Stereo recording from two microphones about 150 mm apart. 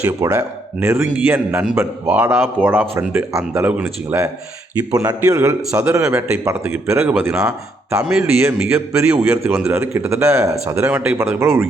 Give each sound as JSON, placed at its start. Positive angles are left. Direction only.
{"t": 0.0, "sound": "a man's voice", "side_deg": -20}